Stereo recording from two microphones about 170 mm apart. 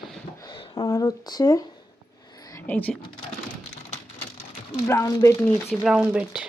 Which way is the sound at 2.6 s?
10° left (ahead or behind).